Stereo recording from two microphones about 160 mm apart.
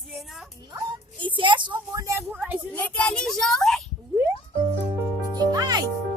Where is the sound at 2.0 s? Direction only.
20° right (ahead or behind).